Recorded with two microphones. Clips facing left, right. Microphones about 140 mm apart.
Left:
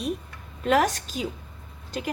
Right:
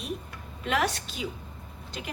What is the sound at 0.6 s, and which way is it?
Speech, 45° left (ahead or behind).